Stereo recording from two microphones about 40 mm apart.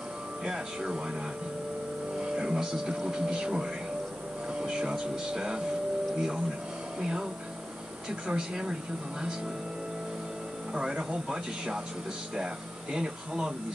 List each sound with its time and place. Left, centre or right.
0.5 s speech: right
2.1 s speech: right
7.0 s speech: centre
8.3 s speech: centre
10.7 s speech: centre
12.9 s speech: centre